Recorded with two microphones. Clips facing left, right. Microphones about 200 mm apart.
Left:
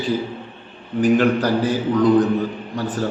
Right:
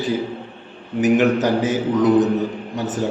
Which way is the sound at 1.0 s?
20° right (ahead or behind).